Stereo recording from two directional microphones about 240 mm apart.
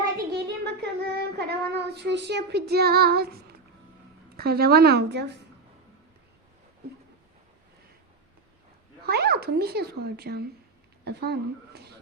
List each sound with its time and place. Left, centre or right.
0.2 s child singing: right
4.4 s speech: right
9.0 s speech: right